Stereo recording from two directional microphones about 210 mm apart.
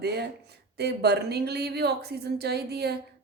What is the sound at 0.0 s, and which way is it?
A woman's voice, 50° right (ahead or behind).